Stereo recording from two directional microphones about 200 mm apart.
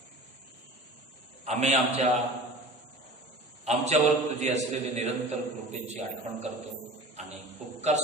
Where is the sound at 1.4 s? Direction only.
35° right (ahead or behind).